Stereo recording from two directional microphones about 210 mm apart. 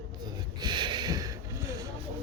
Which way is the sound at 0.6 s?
20° right (ahead or behind).